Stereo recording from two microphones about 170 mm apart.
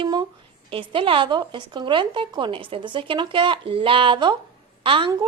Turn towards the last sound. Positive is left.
turn(degrees=-30)  # may be behind; listen again after turning